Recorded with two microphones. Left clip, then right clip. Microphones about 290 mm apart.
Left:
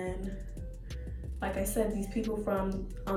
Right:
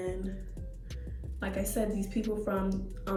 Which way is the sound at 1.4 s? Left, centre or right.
Centre.